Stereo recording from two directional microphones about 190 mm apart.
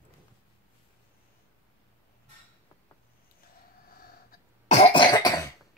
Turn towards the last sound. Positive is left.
turn(degrees=20)  # may be behind; listen again after turning